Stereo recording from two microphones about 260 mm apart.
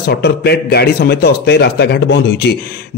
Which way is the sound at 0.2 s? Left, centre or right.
Left.